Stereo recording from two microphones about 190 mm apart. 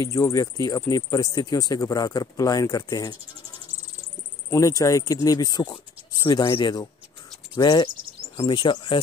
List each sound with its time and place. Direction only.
0.0 s speech: 15° left (ahead or behind)
4.5 s speech: 15° left (ahead or behind)